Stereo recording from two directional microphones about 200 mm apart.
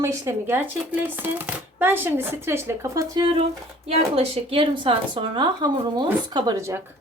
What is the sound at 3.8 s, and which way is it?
Speech, 30° right (ahead or behind).